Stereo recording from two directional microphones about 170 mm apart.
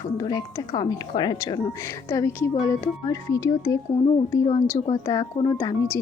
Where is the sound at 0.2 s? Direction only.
25° left (ahead or behind).